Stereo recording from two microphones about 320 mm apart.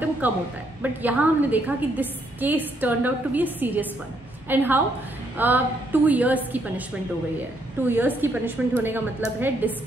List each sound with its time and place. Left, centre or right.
0.2 s a woman's voice: centre
7.9 s a woman's voice: centre